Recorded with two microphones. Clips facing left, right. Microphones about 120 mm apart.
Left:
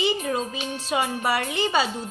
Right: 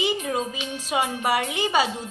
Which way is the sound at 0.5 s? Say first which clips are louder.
Left 1 dB; 40° left (ahead or behind).